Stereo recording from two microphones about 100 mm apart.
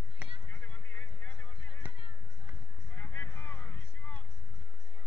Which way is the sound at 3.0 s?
20° left (ahead or behind).